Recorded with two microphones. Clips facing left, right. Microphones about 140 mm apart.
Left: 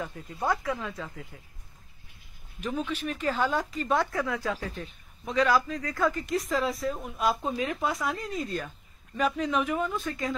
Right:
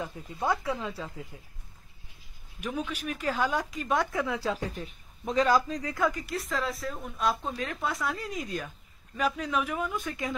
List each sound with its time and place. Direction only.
0.7 s speech: 25° right (ahead or behind)
1.3 s speech: 15° right (ahead or behind)
2.6 s speech: 10° right (ahead or behind)
4.4 s speech: 30° right (ahead or behind)
5.8 s speech: 15° right (ahead or behind)
6.2 s speech: centre (ahead or behind)
8.3 s speech: 10° right (ahead or behind)
9.9 s speech: 15° right (ahead or behind)